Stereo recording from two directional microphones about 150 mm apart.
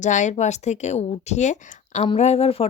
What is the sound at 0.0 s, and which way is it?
Speech, 55° left (ahead or behind).